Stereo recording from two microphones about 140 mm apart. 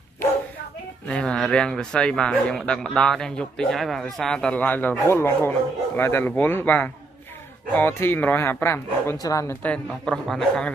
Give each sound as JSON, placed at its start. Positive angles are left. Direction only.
{"t": 1.0, "sound": "a man's voice", "side_deg": 5}